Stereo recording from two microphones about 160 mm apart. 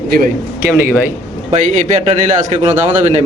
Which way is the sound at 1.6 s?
50° right (ahead or behind).